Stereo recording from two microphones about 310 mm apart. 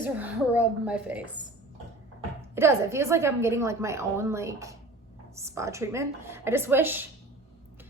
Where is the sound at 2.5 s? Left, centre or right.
Centre.